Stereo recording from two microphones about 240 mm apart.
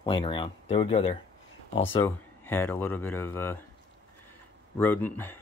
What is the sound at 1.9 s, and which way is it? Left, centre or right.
Speech, centre.